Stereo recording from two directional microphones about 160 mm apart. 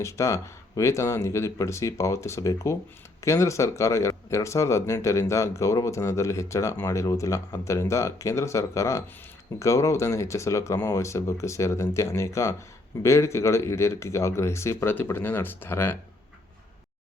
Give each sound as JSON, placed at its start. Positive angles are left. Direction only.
{"t": 0.0, "sound": "speech", "side_deg": 20}